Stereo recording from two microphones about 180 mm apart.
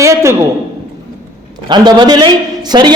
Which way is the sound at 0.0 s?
15° right (ahead or behind).